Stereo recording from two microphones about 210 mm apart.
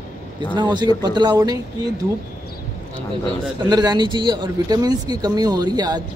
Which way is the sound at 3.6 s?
20° right (ahead or behind).